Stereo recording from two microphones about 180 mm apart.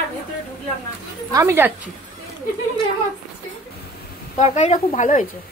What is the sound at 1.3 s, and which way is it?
Speech, 15° right (ahead or behind).